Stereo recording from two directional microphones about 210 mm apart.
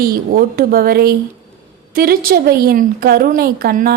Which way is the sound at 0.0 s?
45° right (ahead or behind).